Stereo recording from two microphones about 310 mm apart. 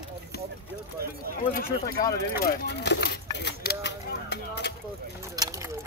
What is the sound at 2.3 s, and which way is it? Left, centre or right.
Speech, left.